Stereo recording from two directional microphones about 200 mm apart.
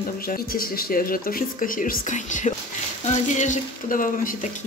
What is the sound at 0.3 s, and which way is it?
A woman's voice, 45° left (ahead or behind).